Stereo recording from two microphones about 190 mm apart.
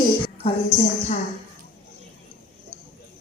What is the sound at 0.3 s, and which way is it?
Speech, 35° left (ahead or behind).